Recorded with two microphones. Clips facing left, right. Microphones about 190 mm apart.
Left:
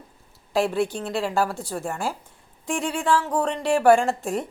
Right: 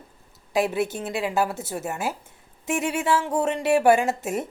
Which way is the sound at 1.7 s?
5° right (ahead or behind).